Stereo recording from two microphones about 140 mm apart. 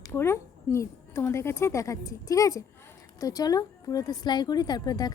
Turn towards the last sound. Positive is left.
turn(degrees=30)  # may be behind; listen again after turning